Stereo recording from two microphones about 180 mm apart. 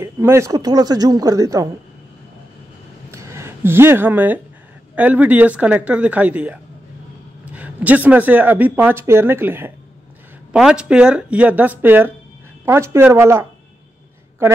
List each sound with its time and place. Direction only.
0.0 s speech: 15° right (ahead or behind)
3.1 s a sound: 15° right (ahead or behind)
4.9 s speech: 10° right (ahead or behind)